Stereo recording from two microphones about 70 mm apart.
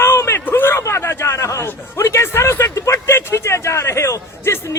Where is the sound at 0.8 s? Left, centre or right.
Left.